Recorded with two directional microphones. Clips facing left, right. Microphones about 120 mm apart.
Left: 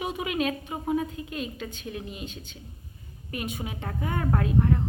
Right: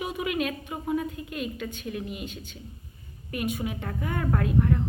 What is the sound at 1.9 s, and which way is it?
Speech, 30° left (ahead or behind).